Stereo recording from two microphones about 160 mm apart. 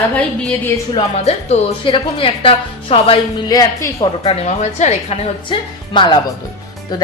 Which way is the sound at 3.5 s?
20° left (ahead or behind).